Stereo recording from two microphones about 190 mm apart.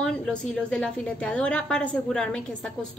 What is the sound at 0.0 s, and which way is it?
A woman's voice, 5° left (ahead or behind).